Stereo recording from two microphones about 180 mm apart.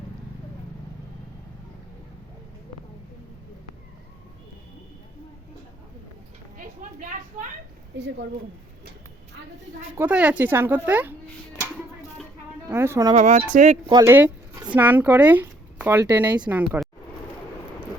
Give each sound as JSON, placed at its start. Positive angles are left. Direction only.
{"t": 6.6, "sound": "a sound", "side_deg": -50}
{"t": 10.0, "sound": "a woman's voice", "side_deg": -5}
{"t": 12.6, "sound": "a woman's voice", "side_deg": -15}
{"t": 13.1, "sound": "speech", "side_deg": -40}
{"t": 13.8, "sound": "a woman's voice", "side_deg": -20}